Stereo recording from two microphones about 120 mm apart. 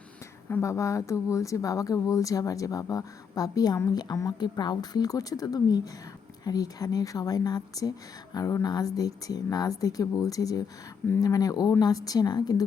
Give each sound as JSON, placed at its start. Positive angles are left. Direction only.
{"t": 0.5, "sound": "speech", "side_deg": 25}